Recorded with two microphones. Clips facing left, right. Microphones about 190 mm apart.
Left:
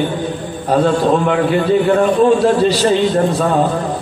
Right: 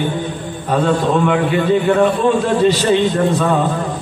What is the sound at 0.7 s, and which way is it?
A man's voice, 35° left (ahead or behind).